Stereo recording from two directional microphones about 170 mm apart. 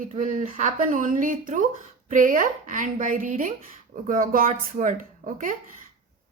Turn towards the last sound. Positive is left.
turn(degrees=-50)  # may be behind; listen again after turning